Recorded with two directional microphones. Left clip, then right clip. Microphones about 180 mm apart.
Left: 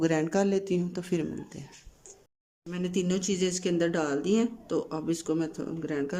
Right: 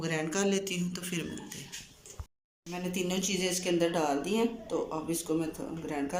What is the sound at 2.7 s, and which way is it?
Speech, 60° left (ahead or behind).